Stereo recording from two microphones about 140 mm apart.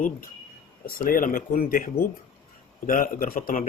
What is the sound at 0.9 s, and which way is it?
Speech, 85° left.